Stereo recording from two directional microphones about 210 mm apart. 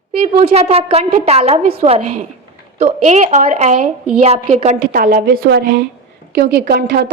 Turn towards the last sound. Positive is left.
turn(degrees=-50)  # may be behind; listen again after turning